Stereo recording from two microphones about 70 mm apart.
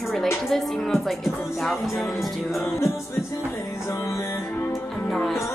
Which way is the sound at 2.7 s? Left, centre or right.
Left.